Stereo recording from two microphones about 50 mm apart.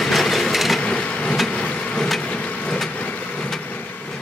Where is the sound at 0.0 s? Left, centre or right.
Centre.